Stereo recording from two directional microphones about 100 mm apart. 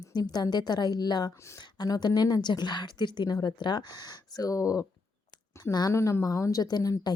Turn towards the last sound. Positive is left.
turn(degrees=40)  # may be behind; listen again after turning